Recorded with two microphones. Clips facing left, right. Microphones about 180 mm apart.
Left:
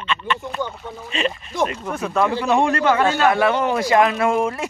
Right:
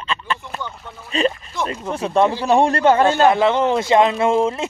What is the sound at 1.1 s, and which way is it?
Speech, 35° right (ahead or behind).